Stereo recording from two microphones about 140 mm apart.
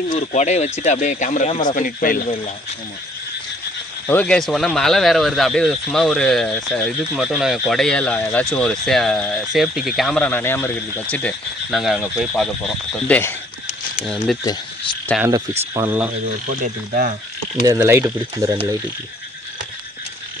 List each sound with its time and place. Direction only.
0.1 s speech: 60° left (ahead or behind)
1.6 s speech: 70° left (ahead or behind); by 2.2 s 90° left
4.1 s speech: 10° left (ahead or behind)
11.7 s speech: 5° right (ahead or behind)
13.1 s speech: 15° left (ahead or behind)
13.9 s speech: centre (ahead or behind)
15.7 s speech: 20° right (ahead or behind)
16.4 s speech: 65° right (ahead or behind)
17.6 s speech: 20° right (ahead or behind)